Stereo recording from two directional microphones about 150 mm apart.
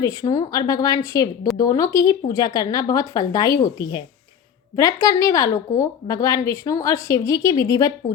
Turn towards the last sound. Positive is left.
turn(degrees=25)  # may be behind; listen again after turning